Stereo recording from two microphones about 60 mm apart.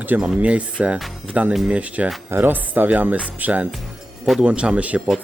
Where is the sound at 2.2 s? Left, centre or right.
Right.